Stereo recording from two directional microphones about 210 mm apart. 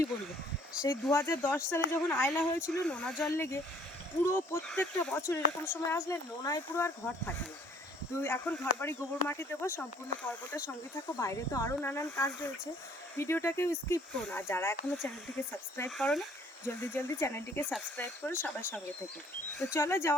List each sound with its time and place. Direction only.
1.0 s speech: 10° left (ahead or behind)